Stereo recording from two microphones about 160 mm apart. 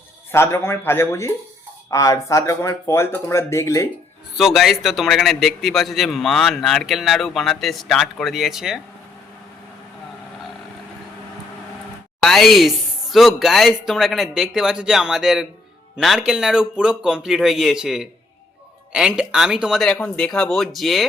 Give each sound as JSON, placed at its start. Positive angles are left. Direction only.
{"t": 0.3, "sound": "speech", "side_deg": 15}
{"t": 4.4, "sound": "a man's voice", "side_deg": 0}
{"t": 12.2, "sound": "a man's voice", "side_deg": 0}